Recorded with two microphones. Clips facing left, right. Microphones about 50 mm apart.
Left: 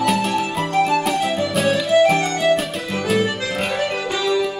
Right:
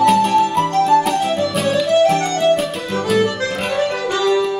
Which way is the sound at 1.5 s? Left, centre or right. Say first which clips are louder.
Left 1 dB; centre.